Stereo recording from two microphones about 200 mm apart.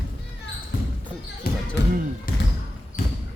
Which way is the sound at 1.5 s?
50° left (ahead or behind).